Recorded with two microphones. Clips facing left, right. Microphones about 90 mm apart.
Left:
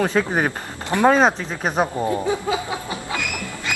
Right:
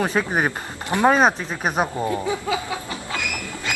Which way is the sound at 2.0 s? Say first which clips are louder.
Left 2 dB; 20° left (ahead or behind).